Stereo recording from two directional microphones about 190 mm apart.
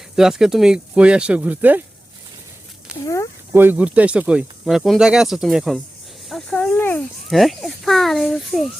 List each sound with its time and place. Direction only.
0.2 s speech: 5° right (ahead or behind)
2.9 s speech: 15° left (ahead or behind)
3.5 s speech: 10° right (ahead or behind)